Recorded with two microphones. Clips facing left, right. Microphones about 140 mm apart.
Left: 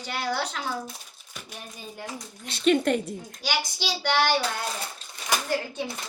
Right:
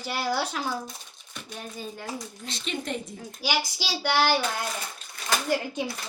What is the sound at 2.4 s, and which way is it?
Speech, 65° left (ahead or behind).